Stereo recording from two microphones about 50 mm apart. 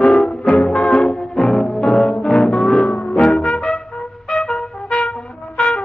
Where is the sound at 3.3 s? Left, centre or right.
Centre.